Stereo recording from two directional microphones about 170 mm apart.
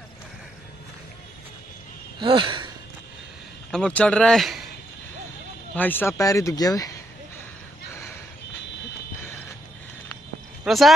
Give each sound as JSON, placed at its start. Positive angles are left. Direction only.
{"t": 2.1, "sound": "sigh", "side_deg": -30}
{"t": 3.7, "sound": "a man's voice", "side_deg": 5}
{"t": 5.8, "sound": "speech", "side_deg": 10}
{"t": 10.6, "sound": "a sound", "side_deg": 0}